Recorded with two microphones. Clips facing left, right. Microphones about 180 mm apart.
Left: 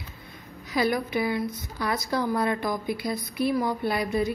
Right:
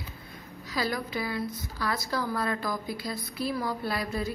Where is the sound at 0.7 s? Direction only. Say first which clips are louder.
Left 6 dB; 20° left (ahead or behind).